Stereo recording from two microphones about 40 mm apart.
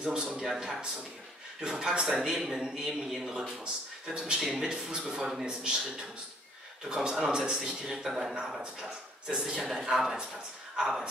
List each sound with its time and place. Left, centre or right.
0.0 s speech: right
1.6 s speech: centre
3.6 s speech: right
7.8 s speech: centre